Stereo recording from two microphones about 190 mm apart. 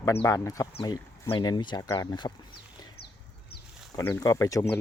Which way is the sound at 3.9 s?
15° left (ahead or behind).